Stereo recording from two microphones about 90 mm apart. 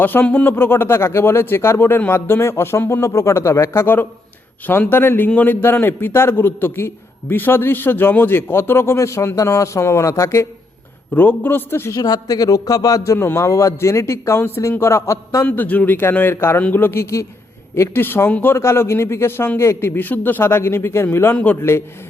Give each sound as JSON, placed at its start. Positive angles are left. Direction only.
{"t": 0.0, "sound": "a man's voice", "side_deg": 20}
{"t": 11.1, "sound": "a man's voice", "side_deg": 20}
{"t": 11.9, "sound": "a man's voice", "side_deg": 45}
{"t": 13.1, "sound": "a man's voice", "side_deg": 30}
{"t": 15.4, "sound": "a man's voice", "side_deg": 20}